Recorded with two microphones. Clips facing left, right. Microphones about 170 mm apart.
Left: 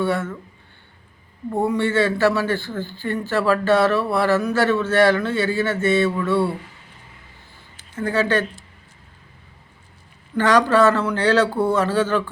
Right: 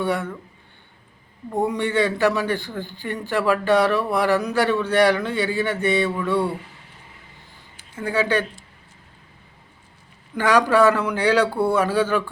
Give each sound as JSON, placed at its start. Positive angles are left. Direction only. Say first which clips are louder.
{"t": 0.0, "sound": "a man's voice", "louder": "left 2 dB", "side_deg": -15}
{"t": 1.5, "sound": "a man's voice", "louder": "left 2 dB", "side_deg": -15}
{"t": 7.8, "sound": "speech", "louder": "left 2 dB", "side_deg": -10}
{"t": 10.3, "sound": "a man's voice", "louder": "left 1 dB", "side_deg": -10}